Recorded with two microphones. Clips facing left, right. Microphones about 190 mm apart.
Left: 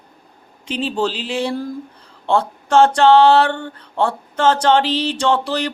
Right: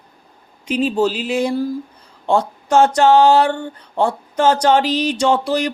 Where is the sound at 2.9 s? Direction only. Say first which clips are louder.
Even; 10° right (ahead or behind).